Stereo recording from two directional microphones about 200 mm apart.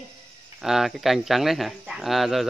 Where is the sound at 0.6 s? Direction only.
Centre (ahead or behind).